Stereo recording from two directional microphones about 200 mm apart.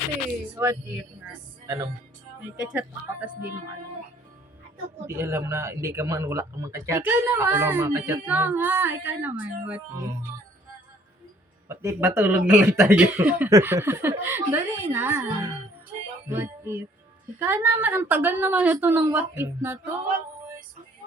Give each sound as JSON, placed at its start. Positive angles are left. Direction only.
{"t": 0.5, "sound": "a man's voice", "side_deg": -10}
{"t": 5.0, "sound": "a man's voice", "side_deg": -10}
{"t": 11.7, "sound": "a man's voice", "side_deg": -15}